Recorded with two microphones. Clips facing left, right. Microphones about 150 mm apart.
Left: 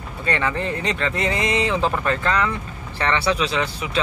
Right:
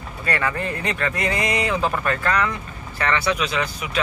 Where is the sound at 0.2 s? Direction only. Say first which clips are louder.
Left 1 dB; 20° left (ahead or behind).